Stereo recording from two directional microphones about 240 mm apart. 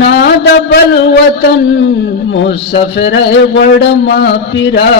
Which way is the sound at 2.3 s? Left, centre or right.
Left.